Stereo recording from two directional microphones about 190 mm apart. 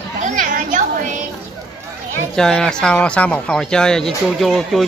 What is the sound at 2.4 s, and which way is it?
Speech, 5° left (ahead or behind).